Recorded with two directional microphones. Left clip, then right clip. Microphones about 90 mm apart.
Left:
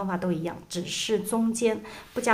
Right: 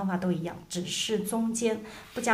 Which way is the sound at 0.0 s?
30° left (ahead or behind).